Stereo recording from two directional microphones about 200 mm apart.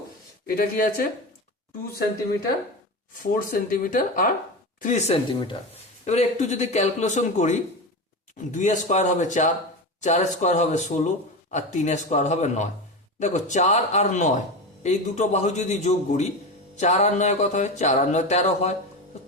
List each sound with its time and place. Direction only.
0.4 s speech: 45° left (ahead or behind)
3.3 s speech: 45° left (ahead or behind)
4.8 s a sound: 35° left (ahead or behind)